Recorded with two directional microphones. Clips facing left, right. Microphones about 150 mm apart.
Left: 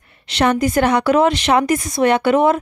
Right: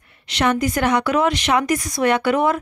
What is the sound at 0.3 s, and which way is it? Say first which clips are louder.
A woman's voice: left 3 dB; 30° left (ahead or behind).